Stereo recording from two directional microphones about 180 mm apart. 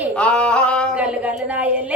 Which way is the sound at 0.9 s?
5° right (ahead or behind).